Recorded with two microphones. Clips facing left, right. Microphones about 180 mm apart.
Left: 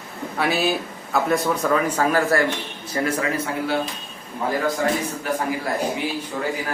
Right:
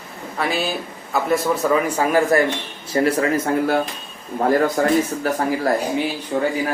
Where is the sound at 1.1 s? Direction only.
5° right (ahead or behind).